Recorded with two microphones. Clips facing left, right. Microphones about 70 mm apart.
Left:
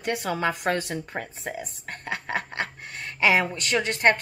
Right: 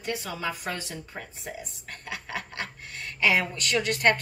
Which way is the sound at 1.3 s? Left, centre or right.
Left.